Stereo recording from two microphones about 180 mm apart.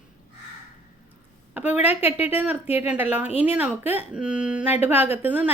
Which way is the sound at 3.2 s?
35° left (ahead or behind).